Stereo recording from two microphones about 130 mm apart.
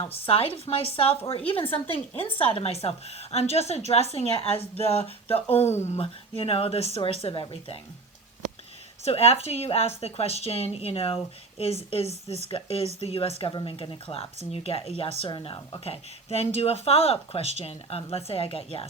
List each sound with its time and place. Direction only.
0.0 s a woman's voice: 45° left (ahead or behind)
9.0 s a woman's voice: 50° left (ahead or behind)